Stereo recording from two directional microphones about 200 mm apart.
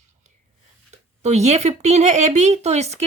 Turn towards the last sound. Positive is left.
turn(degrees=-35)  # may be behind; listen again after turning